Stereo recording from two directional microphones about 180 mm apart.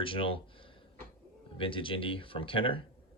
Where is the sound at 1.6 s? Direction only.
30° left (ahead or behind).